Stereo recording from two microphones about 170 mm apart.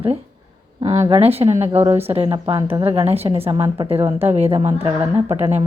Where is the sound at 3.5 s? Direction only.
20° right (ahead or behind).